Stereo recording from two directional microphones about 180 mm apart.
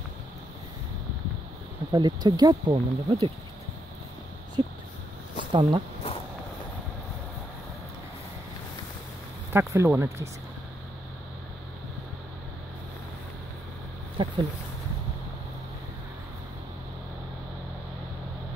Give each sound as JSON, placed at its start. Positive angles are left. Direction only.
{"t": 1.9, "sound": "speech", "side_deg": -20}
{"t": 4.6, "sound": "a sound", "side_deg": -25}
{"t": 5.5, "sound": "speech", "side_deg": -30}
{"t": 9.5, "sound": "speech", "side_deg": -15}
{"t": 14.1, "sound": "speech", "side_deg": -25}